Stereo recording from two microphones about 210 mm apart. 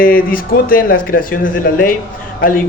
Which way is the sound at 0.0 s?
45° left (ahead or behind).